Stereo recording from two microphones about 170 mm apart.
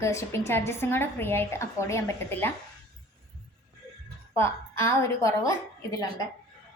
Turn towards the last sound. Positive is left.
turn(degrees=20)  # may be behind; listen again after turning